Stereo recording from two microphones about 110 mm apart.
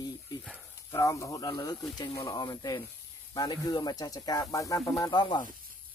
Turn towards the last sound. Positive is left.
turn(degrees=40)  # may be behind; listen again after turning